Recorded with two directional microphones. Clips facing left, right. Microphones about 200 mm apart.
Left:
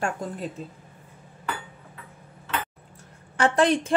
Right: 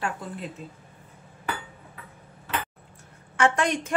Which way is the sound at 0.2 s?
45° left (ahead or behind).